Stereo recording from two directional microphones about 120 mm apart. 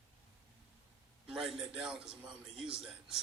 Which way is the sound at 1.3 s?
5° right (ahead or behind).